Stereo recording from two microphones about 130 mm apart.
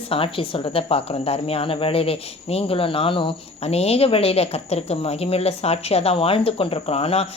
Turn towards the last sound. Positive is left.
turn(degrees=50)  # may be behind; listen again after turning